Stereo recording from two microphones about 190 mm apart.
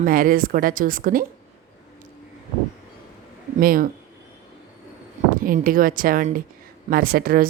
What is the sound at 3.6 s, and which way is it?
Speech, 50° right (ahead or behind).